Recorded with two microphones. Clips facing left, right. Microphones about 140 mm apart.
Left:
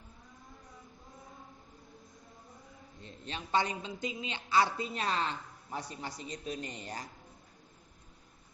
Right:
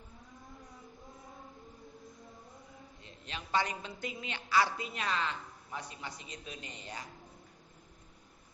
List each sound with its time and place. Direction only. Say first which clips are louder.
3.0 s a woman's voice: left 4 dB; 35° left (ahead or behind)